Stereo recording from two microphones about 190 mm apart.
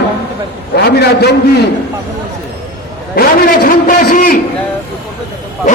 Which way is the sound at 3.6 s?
50° left (ahead or behind).